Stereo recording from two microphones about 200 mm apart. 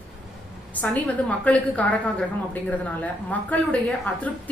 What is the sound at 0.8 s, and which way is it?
A woman's voice, 10° left (ahead or behind).